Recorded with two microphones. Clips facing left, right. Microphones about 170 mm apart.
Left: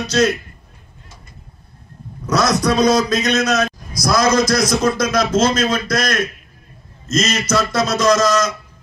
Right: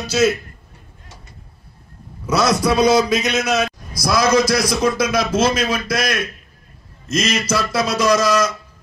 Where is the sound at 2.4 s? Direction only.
30° right (ahead or behind).